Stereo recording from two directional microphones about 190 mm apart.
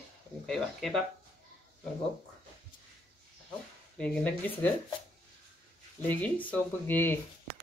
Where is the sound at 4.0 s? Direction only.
10° left (ahead or behind).